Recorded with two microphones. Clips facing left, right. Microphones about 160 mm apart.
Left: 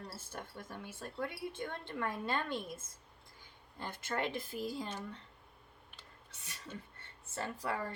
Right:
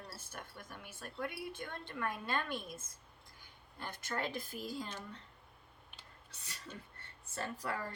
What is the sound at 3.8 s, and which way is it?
Speech, 25° left (ahead or behind).